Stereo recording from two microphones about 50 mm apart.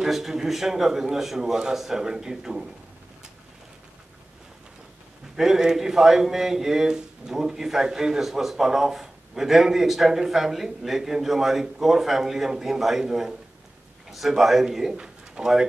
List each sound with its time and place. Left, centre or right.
0.0 s speech: centre
5.3 s a man's voice: centre